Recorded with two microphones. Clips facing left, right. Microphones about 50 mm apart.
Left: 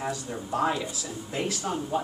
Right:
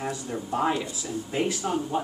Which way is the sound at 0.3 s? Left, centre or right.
Centre.